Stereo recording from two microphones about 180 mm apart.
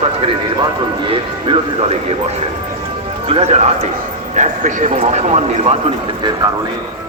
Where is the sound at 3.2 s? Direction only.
35° right (ahead or behind).